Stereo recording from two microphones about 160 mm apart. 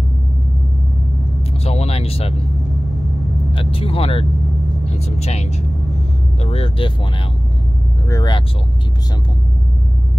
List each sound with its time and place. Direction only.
1.6 s vehicle: 40° left (ahead or behind)
3.5 s speech: 35° left (ahead or behind)
8.1 s speech: 25° left (ahead or behind)